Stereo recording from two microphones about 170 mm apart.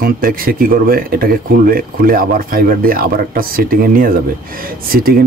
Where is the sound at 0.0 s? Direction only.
60° right (ahead or behind).